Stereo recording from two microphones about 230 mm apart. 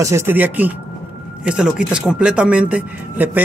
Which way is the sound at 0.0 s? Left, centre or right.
Centre.